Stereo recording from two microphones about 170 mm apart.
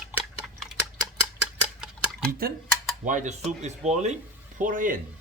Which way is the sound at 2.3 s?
60° right (ahead or behind).